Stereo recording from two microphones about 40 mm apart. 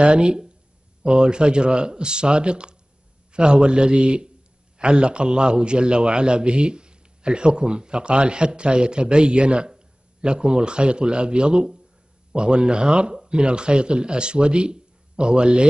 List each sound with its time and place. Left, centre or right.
0.0 s a man's voice: right
3.9 s a man's voice: right
4.7 s a man's voice: right